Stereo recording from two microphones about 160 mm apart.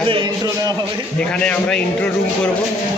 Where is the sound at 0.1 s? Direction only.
30° right (ahead or behind).